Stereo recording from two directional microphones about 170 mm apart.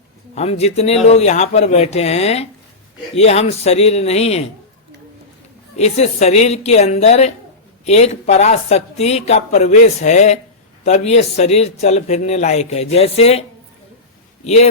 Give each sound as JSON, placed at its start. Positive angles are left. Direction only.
{"t": 0.3, "sound": "a woman's voice", "side_deg": 40}
{"t": 5.7, "sound": "a woman's voice", "side_deg": 40}
{"t": 14.4, "sound": "a woman's voice", "side_deg": 40}